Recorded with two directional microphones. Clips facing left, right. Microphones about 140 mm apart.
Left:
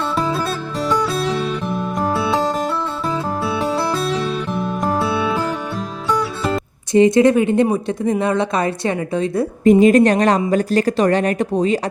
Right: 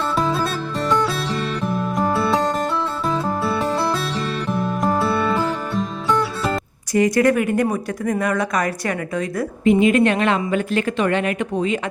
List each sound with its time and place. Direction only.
0.2 s music: centre (ahead or behind)
6.9 s speech: 25° left (ahead or behind)
9.6 s speech: 40° left (ahead or behind)